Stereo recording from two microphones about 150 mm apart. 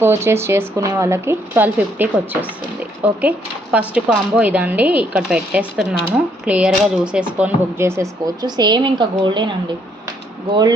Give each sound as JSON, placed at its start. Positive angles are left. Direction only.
{"t": 0.0, "sound": "speech", "side_deg": -15}